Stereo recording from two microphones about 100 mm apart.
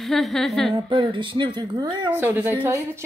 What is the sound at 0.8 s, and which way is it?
Speech, 55° right (ahead or behind).